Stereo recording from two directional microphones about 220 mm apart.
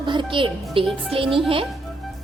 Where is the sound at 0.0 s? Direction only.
20° right (ahead or behind).